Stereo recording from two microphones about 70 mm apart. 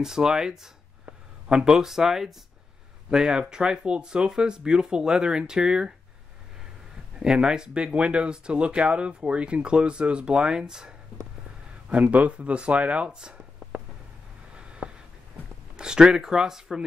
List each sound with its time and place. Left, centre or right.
0.0 s speech: centre
7.2 s speech: centre
14.5 s a sound: centre
15.7 s speech: centre